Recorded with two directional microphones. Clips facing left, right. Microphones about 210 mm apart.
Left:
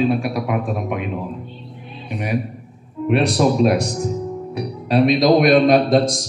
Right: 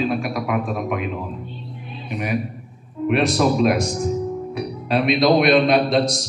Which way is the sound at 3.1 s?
35° left (ahead or behind).